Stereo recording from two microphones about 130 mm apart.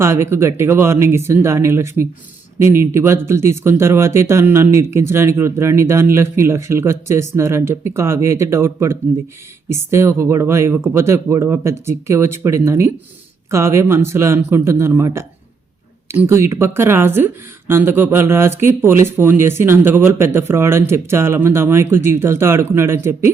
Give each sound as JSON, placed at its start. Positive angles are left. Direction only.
{"t": 0.0, "sound": "speech", "side_deg": -20}